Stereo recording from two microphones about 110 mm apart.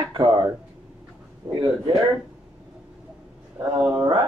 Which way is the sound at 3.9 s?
45° right (ahead or behind).